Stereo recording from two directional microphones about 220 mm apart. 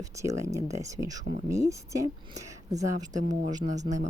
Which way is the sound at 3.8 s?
35° right (ahead or behind).